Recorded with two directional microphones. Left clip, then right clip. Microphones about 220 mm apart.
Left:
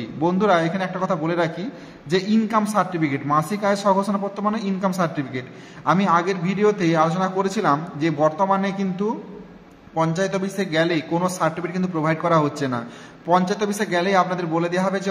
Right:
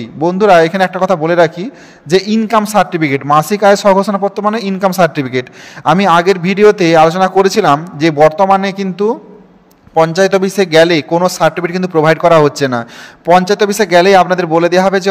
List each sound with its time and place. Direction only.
0.0 s a man's voice: 30° right (ahead or behind)